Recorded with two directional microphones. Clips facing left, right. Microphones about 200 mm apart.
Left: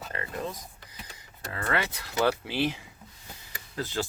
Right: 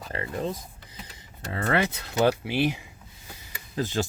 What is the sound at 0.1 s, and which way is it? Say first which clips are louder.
Speech: right 5 dB; 30° right (ahead or behind).